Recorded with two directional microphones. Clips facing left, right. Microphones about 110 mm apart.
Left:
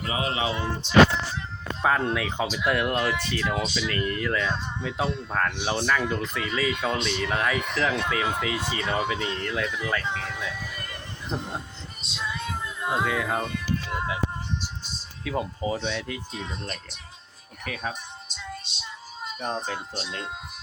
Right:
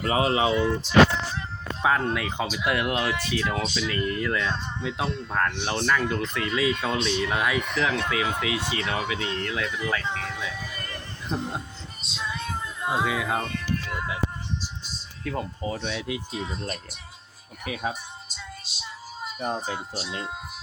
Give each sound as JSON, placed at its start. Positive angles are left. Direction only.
{"t": 0.2, "sound": "a sound", "side_deg": -30}
{"t": 0.5, "sound": "speech", "side_deg": 35}
{"t": 1.8, "sound": "speech", "side_deg": 0}
{"t": 12.1, "sound": "music", "side_deg": 0}
{"t": 15.2, "sound": "speech", "side_deg": 10}
{"t": 15.8, "sound": "speech", "side_deg": -5}
{"t": 17.7, "sound": "music", "side_deg": -5}
{"t": 19.2, "sound": "speech", "side_deg": -5}